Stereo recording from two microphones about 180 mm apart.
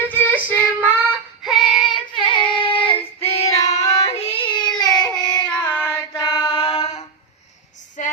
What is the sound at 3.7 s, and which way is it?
Child singing, 35° left (ahead or behind).